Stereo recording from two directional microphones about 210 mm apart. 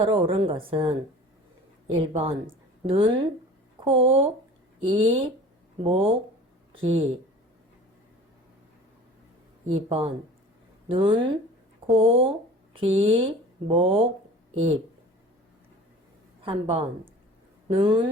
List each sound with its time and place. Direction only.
0.0 s speech: 25° right (ahead or behind)
9.6 s speech: 25° right (ahead or behind)
16.4 s a woman's voice: 25° right (ahead or behind)